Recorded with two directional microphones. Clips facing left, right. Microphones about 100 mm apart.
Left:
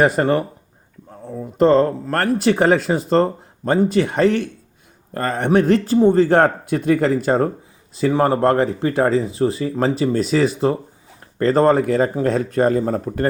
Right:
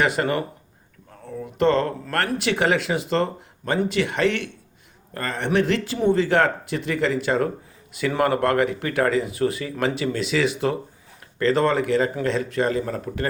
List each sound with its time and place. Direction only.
0.0 s speech: 40° left (ahead or behind)